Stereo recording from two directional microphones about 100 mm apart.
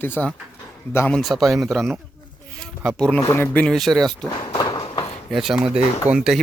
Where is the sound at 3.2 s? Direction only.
25° left (ahead or behind).